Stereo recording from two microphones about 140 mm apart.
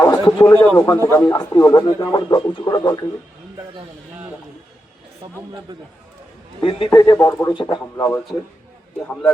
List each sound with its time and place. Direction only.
0.0 s a sound: 25° left (ahead or behind)
0.5 s a man's voice: 10° left (ahead or behind)
0.8 s speech: 20° left (ahead or behind)
6.6 s speech: 40° left (ahead or behind)
6.9 s speech: 30° left (ahead or behind)
7.9 s a man's voice: 15° left (ahead or behind)